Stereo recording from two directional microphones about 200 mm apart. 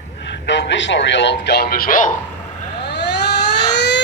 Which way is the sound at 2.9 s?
60° left (ahead or behind).